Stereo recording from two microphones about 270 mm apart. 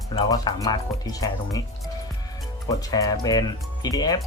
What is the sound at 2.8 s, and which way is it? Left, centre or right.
Speech, centre.